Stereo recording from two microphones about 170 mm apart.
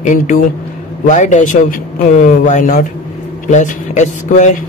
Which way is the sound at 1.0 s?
45° left (ahead or behind).